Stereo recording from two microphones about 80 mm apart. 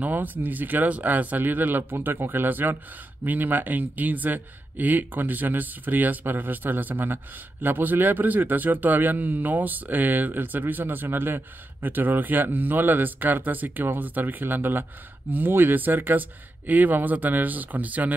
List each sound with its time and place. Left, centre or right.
0.0 s speech: right